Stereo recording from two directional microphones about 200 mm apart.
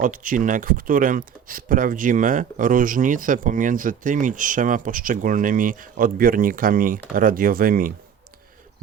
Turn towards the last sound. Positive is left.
turn(degrees=-45)  # may be behind; listen again after turning